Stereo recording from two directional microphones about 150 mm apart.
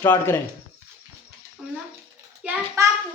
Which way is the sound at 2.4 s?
10° right (ahead or behind).